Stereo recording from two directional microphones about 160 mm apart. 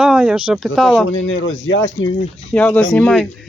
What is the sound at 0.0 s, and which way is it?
Speech, 5° right (ahead or behind).